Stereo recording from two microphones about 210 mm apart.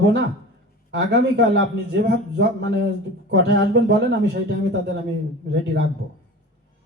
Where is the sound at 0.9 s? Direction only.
55° right (ahead or behind).